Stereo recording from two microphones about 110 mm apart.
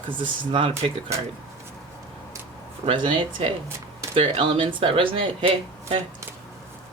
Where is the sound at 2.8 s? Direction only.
50° right (ahead or behind).